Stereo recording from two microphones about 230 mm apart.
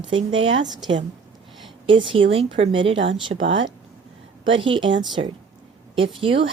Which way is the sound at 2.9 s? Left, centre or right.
Right.